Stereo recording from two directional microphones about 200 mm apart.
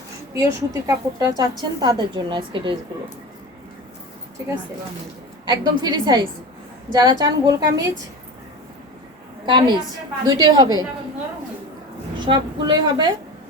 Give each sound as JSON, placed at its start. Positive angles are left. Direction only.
{"t": 0.3, "sound": "a woman's voice", "side_deg": -15}
{"t": 5.5, "sound": "a woman's voice", "side_deg": -20}
{"t": 9.5, "sound": "a woman's voice", "side_deg": -20}
{"t": 12.2, "sound": "a woman's voice", "side_deg": -20}